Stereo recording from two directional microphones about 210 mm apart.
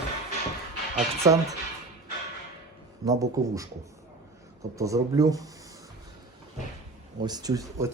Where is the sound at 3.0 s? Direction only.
15° right (ahead or behind).